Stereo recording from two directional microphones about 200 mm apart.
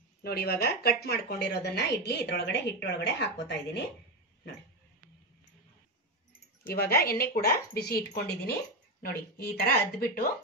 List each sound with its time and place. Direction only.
0.2 s a woman's voice: 50° left (ahead or behind)
6.6 s speech: 50° left (ahead or behind)